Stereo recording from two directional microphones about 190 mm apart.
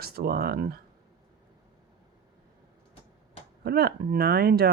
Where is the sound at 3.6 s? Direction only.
55° right (ahead or behind).